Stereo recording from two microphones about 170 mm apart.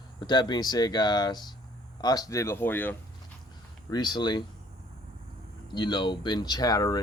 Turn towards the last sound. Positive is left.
turn(degrees=20)  # may be behind; listen again after turning